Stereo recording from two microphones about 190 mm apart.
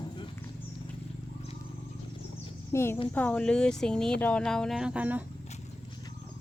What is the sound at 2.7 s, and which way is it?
Speech, 15° left (ahead or behind).